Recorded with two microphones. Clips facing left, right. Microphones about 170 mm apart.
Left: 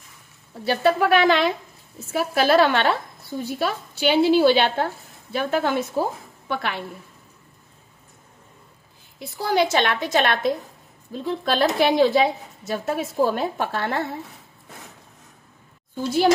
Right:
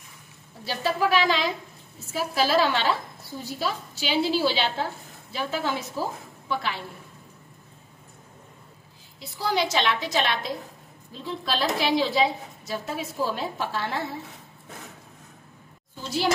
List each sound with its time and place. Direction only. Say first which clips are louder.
0.7 s a woman's voice: left 6 dB; 60° left (ahead or behind)
9.4 s a woman's voice: left 5 dB; 50° left (ahead or behind)